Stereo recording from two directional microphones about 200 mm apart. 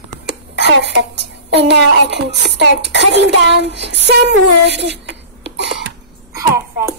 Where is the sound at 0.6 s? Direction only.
60° right (ahead or behind).